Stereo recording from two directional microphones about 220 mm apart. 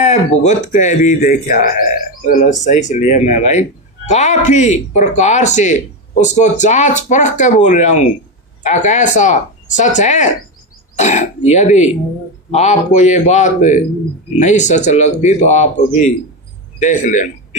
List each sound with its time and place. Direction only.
0.0 s a man's voice: 30° left (ahead or behind)